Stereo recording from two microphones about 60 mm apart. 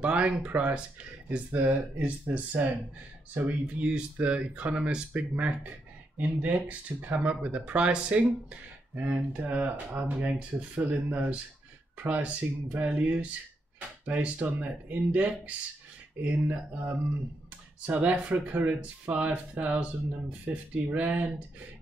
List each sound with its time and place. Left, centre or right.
0.0 s speech: centre